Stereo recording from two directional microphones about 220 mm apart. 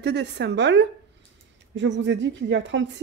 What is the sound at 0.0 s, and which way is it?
A woman's voice, 50° right (ahead or behind).